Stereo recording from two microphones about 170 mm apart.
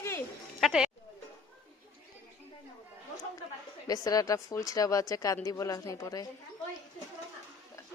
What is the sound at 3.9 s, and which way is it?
Speech, 20° left (ahead or behind).